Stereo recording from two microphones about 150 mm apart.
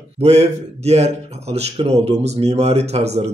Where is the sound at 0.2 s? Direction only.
45° right (ahead or behind).